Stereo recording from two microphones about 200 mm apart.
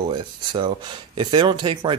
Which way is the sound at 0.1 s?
25° right (ahead or behind).